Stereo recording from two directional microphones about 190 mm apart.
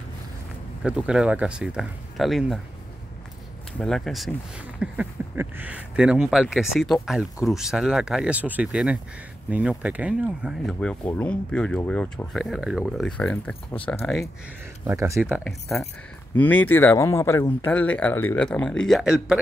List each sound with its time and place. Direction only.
0.8 s speech: 5° right (ahead or behind)
3.8 s speech: centre (ahead or behind)
14.9 s speech: 15° right (ahead or behind)
15.1 s speech: centre (ahead or behind)